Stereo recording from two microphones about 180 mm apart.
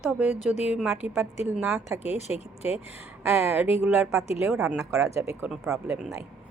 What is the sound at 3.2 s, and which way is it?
A woman's voice, 15° right (ahead or behind).